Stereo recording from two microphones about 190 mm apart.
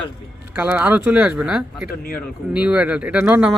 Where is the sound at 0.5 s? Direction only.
10° right (ahead or behind).